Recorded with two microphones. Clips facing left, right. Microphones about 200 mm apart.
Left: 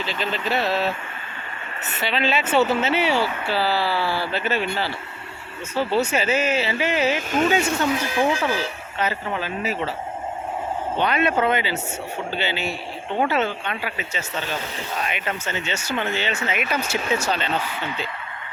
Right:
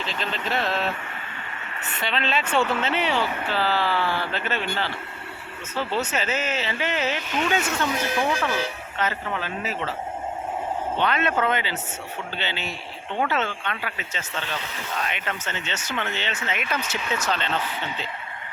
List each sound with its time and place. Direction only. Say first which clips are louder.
0.0 s speech: left 3 dB; 5° left (ahead or behind)
2.0 s speech: left 3 dB; 5° left (ahead or behind)
7.2 s speech: left 5 dB; 45° left (ahead or behind)
7.5 s speech: left 4 dB; 10° left (ahead or behind)
10.9 s speech: left 3 dB; 10° left (ahead or behind)